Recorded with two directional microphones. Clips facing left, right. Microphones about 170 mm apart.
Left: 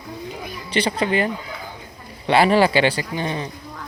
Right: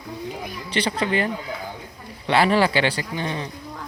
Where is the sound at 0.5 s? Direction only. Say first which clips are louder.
Left 4 dB; 15° left (ahead or behind).